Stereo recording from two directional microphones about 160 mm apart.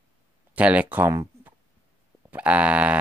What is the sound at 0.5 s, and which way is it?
Speech, 10° right (ahead or behind).